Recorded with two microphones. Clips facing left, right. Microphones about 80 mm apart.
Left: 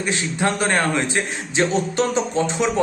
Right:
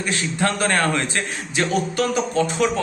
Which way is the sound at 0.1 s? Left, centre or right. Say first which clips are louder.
Even; left.